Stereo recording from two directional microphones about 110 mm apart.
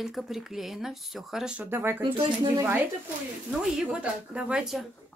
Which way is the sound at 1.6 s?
20° right (ahead or behind).